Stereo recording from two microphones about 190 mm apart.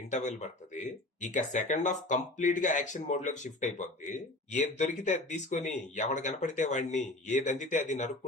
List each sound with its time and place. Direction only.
0.1 s speech: 40° left (ahead or behind)